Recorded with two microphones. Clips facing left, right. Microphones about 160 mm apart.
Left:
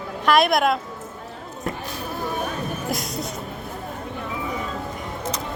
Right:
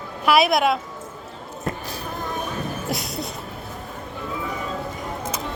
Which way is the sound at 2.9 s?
Centre (ahead or behind).